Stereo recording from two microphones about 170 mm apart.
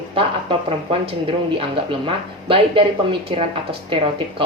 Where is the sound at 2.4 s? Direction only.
30° right (ahead or behind).